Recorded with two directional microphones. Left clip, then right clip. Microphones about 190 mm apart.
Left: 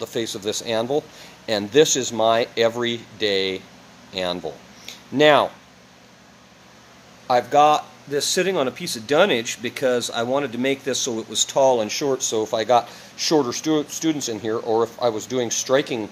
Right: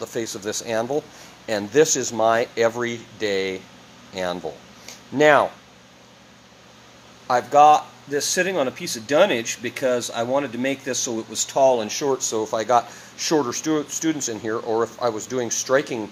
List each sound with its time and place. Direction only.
0.0 s speech: 10° left (ahead or behind)
7.2 s speech: 10° left (ahead or behind)